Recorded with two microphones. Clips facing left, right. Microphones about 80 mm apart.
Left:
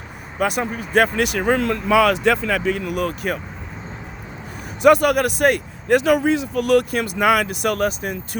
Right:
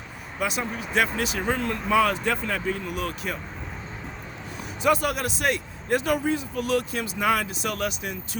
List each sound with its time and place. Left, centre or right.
0.3 s speech: left
4.8 s speech: left